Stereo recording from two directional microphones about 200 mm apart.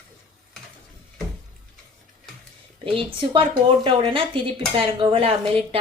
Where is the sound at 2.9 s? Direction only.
25° right (ahead or behind).